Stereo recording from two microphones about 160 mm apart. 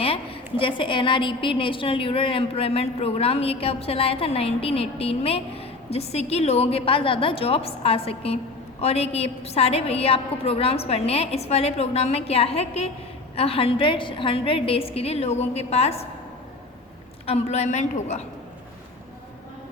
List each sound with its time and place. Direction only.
0.0 s a woman's voice: 35° left (ahead or behind)
17.2 s a woman's voice: 40° left (ahead or behind)